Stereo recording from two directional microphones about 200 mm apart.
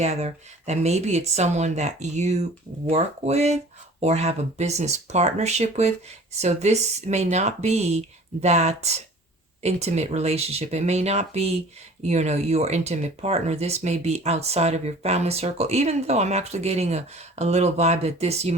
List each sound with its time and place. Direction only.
0.0 s speech: 35° right (ahead or behind)